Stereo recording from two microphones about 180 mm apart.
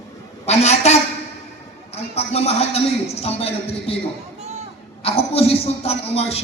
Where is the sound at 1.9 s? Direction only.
35° left (ahead or behind).